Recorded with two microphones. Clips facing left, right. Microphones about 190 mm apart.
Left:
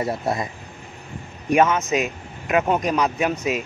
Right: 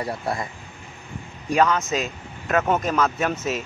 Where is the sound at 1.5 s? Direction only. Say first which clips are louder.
Left 2 dB; 20° left (ahead or behind).